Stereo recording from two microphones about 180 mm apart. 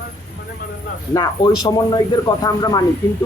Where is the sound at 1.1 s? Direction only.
20° left (ahead or behind).